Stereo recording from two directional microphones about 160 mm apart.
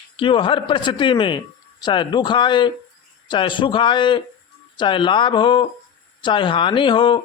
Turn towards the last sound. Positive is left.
turn(degrees=30)  # may be behind; listen again after turning